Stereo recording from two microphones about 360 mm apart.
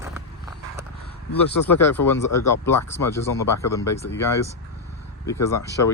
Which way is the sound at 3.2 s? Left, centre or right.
Left.